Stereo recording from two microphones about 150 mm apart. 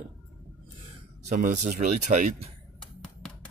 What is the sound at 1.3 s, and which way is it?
Speech, 60° right (ahead or behind).